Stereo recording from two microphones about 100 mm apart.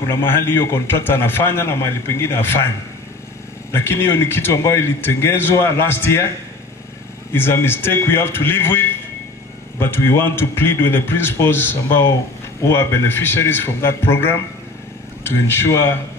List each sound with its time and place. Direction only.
0.1 s a man's voice: 25° left (ahead or behind)
3.7 s a man's voice: 25° left (ahead or behind)
7.3 s a man's voice: 20° left (ahead or behind)